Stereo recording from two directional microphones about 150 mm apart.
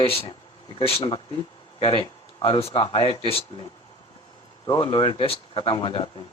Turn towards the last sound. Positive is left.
turn(degrees=35)  # may be behind; listen again after turning